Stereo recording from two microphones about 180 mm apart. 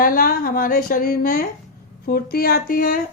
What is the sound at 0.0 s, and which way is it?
A woman's voice, 55° left (ahead or behind).